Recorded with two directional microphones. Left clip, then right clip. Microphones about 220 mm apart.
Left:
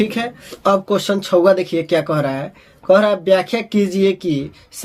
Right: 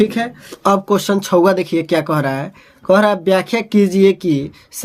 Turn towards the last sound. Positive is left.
turn(degrees=-35)  # may be behind; listen again after turning